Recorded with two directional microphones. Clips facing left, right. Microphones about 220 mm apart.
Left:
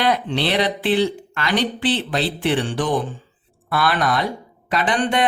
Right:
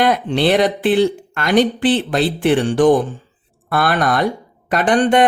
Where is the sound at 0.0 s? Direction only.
50° right (ahead or behind).